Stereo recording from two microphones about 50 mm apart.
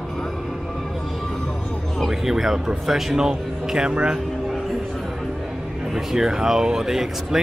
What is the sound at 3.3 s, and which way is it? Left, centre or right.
Speech, centre.